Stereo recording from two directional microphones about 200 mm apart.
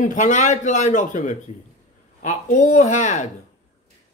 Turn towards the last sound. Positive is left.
turn(degrees=35)  # may be behind; listen again after turning